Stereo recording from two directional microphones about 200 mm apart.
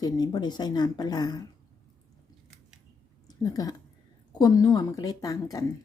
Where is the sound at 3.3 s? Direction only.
20° left (ahead or behind).